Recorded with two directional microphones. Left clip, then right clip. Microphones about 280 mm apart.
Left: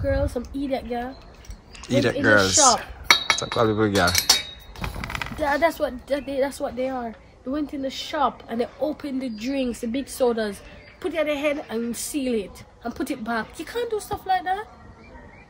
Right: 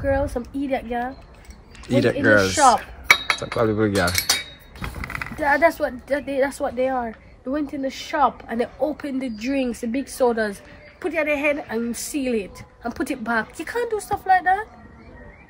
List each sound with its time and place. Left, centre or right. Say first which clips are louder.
0.0 s a woman's voice: right 3 dB; centre
4.1 s keys jangling: left 2 dB; left
5.4 s a woman's voice: right 4 dB; centre